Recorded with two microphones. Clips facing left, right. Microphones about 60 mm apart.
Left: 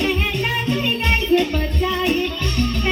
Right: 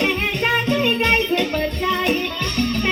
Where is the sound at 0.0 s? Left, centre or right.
Right.